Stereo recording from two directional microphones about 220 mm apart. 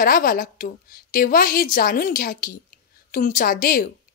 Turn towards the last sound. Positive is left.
turn(degrees=40)  # may be behind; listen again after turning